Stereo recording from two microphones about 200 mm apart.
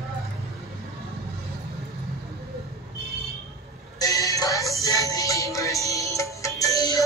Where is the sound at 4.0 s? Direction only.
15° left (ahead or behind).